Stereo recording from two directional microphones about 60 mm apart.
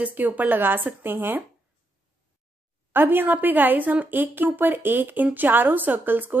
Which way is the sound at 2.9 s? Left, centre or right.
Right.